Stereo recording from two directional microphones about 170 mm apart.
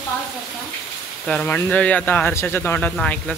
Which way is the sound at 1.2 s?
5° left (ahead or behind).